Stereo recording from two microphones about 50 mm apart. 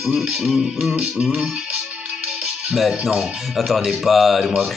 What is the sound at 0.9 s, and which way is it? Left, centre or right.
Music, centre.